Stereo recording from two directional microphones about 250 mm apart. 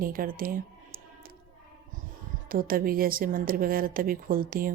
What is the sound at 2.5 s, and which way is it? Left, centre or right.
A woman's voice, right.